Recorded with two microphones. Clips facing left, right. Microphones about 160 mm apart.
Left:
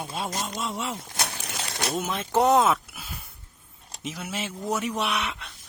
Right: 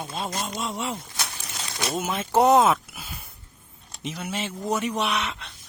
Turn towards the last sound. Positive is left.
turn(degrees=5)  # may be behind; listen again after turning